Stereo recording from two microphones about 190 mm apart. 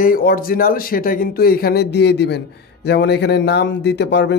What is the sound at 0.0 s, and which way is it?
Speech, 50° left (ahead or behind).